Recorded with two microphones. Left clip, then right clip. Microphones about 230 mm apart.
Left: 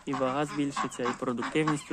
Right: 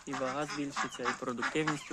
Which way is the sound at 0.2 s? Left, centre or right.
Centre.